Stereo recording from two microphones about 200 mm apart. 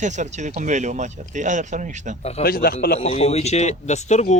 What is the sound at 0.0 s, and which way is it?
Speech, 35° right (ahead or behind).